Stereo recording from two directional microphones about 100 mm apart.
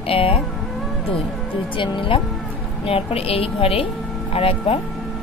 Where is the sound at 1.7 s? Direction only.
60° left (ahead or behind).